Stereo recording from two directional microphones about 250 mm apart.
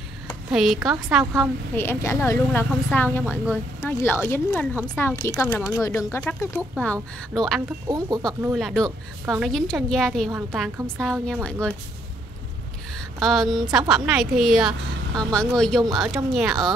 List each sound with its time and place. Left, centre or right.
0.5 s a woman's voice: centre
1.4 s speech: centre
7.9 s speech: centre
8.3 s a woman's voice: centre
13.2 s a woman's voice: centre